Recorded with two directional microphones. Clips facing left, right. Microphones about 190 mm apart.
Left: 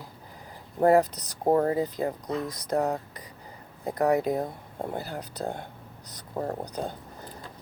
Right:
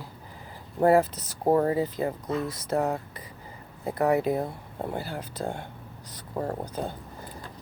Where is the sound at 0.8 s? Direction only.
40° left (ahead or behind).